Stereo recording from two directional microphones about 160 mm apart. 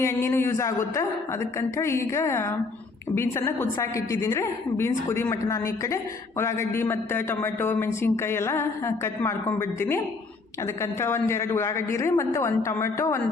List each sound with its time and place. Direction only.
0.0 s a woman's voice: 15° left (ahead or behind)